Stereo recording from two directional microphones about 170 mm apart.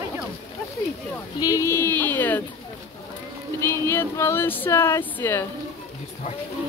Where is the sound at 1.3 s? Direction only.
20° left (ahead or behind).